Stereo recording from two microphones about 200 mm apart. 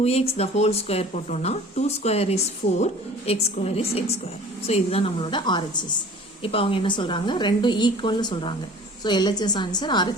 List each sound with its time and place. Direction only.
0.0 s a woman's voice: 30° left (ahead or behind)